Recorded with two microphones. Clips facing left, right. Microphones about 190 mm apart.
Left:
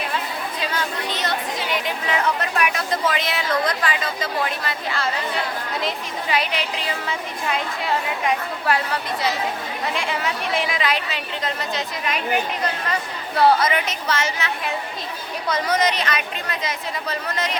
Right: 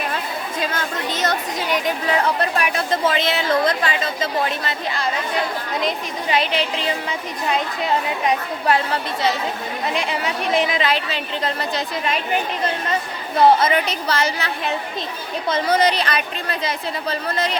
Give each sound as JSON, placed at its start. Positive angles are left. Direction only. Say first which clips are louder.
{"t": 0.6, "sound": "speech", "louder": "right 2 dB", "side_deg": -45}
{"t": 6.3, "sound": "a woman's voice", "louder": "right 4 dB", "side_deg": -25}